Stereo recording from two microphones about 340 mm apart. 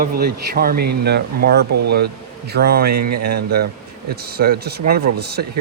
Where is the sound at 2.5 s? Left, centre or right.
Right.